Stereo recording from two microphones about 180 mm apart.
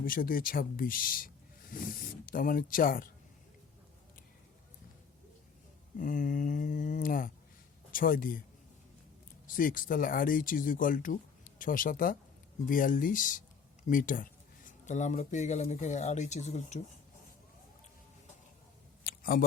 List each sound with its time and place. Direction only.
0.0 s speech: 55° left (ahead or behind)
6.0 s speech: 45° left (ahead or behind)
9.5 s speech: 50° left (ahead or behind)
19.0 s a sound: 55° left (ahead or behind)